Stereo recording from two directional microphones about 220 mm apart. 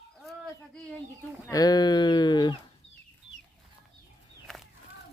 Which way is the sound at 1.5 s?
15° left (ahead or behind).